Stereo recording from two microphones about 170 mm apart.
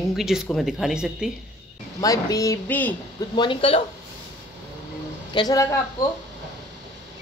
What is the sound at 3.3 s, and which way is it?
Speech, 30° left (ahead or behind).